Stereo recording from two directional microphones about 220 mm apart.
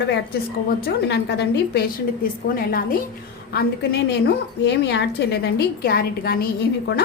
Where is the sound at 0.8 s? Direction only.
50° left (ahead or behind).